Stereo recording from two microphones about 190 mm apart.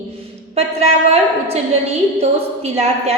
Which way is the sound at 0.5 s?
35° right (ahead or behind).